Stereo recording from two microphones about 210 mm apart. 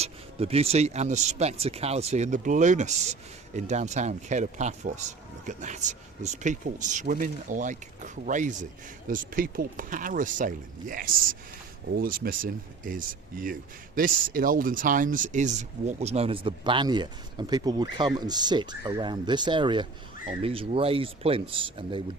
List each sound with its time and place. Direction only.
0.0 s speech: 30° right (ahead or behind)